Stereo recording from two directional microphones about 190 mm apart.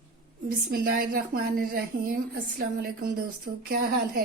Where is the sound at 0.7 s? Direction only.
50° right (ahead or behind).